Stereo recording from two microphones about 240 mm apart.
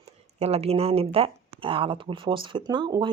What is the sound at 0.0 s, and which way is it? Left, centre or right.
Speech, right.